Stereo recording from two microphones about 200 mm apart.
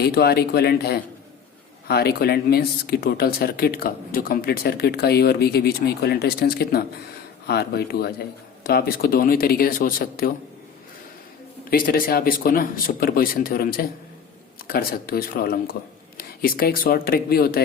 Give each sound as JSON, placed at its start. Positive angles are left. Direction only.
{"t": 0.0, "sound": "speech", "side_deg": 55}
{"t": 11.7, "sound": "speech", "side_deg": 45}